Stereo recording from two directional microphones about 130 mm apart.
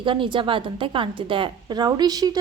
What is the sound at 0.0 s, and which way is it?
A woman's voice, 40° right (ahead or behind).